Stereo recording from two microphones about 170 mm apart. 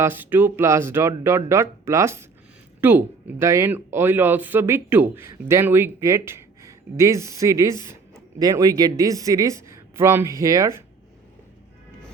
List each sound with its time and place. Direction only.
0.0 s speech: 10° right (ahead or behind)